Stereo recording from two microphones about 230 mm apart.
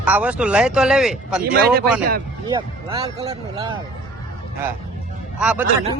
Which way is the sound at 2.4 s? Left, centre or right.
Right.